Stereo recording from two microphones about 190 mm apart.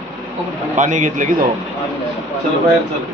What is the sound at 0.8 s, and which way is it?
Speech, 40° right (ahead or behind).